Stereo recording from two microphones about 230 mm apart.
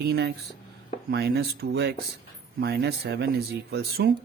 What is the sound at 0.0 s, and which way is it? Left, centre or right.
A man's voice, right.